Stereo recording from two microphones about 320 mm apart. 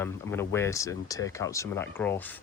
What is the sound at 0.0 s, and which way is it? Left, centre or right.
Speech, centre.